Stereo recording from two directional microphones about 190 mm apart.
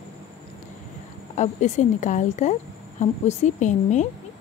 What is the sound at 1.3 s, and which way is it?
A woman's voice, 40° left (ahead or behind).